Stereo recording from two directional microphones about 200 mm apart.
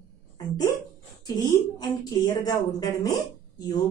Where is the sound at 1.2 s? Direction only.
20° left (ahead or behind).